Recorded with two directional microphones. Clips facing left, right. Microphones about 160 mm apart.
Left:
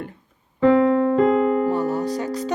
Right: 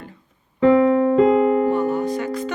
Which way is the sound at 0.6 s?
5° right (ahead or behind).